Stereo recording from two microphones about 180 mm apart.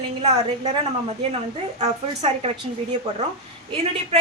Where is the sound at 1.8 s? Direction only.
40° right (ahead or behind).